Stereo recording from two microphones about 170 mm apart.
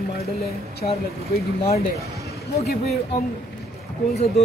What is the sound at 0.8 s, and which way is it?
Speech, 45° left (ahead or behind).